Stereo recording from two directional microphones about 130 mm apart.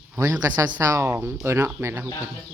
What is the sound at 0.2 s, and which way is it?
Speech, 25° right (ahead or behind).